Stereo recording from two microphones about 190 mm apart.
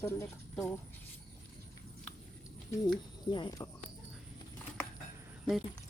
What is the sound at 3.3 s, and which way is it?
Speech, 20° left (ahead or behind).